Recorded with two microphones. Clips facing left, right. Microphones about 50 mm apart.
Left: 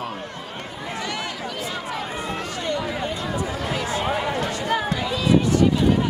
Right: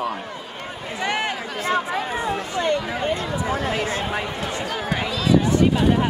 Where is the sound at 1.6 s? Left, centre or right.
Right.